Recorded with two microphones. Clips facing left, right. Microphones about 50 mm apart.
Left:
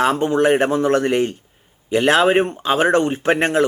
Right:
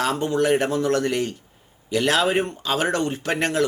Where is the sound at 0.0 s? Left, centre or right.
Left.